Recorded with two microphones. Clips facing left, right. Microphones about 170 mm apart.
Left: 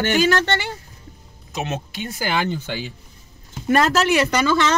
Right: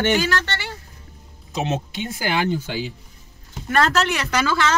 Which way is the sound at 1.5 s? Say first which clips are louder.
Right 2 dB; 25° right (ahead or behind).